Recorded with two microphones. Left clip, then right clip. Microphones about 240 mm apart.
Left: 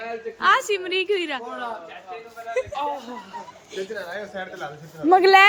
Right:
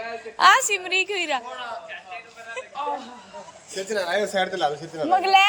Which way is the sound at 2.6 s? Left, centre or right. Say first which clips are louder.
Left 10 dB; centre.